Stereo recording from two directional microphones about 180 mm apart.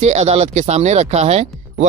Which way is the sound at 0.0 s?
40° right (ahead or behind).